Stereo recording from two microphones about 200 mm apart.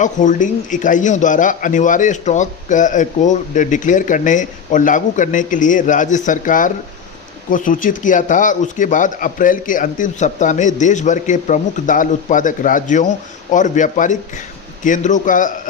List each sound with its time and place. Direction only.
0.0 s a man's voice: 40° left (ahead or behind)